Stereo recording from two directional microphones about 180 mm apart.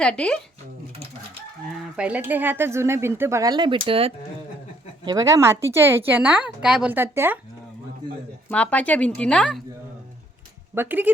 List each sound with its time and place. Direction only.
0.0 s speech: 5° left (ahead or behind)
2.0 s speech: 10° right (ahead or behind); by 4.1 s 30° right (ahead or behind)
5.0 s speech: 20° right (ahead or behind)
8.4 s speech: 10° left (ahead or behind)
10.8 s speech: 10° right (ahead or behind)